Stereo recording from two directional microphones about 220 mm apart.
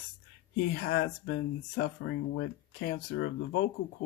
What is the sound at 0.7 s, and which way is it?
Speech, 50° left (ahead or behind).